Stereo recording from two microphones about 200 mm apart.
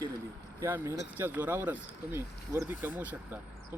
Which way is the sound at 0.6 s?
10° right (ahead or behind).